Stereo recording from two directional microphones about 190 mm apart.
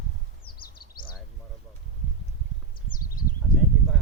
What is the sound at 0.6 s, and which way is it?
Bird, 50° left (ahead or behind).